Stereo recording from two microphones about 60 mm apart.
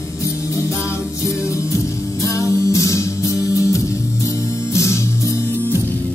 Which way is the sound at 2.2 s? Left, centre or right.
Left.